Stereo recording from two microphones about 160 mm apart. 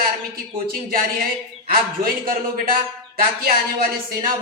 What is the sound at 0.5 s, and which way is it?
A man's voice, 65° right (ahead or behind).